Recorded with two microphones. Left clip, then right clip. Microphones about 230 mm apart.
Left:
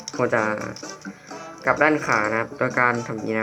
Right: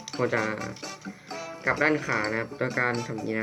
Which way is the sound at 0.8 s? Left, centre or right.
Right.